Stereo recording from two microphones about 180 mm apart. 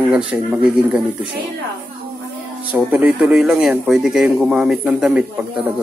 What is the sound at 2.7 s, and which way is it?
Speech, 10° right (ahead or behind).